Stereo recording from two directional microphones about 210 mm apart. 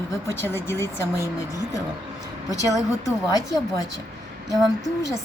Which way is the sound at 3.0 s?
15° left (ahead or behind).